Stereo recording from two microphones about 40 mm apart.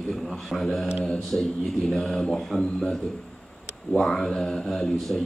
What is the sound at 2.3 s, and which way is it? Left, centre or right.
Speech, centre.